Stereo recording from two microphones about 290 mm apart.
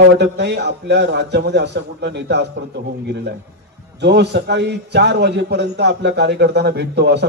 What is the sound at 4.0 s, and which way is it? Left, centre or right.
A man's voice, right.